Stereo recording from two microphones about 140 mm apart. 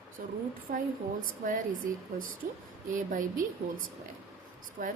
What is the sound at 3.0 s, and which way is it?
Speech, 70° right (ahead or behind).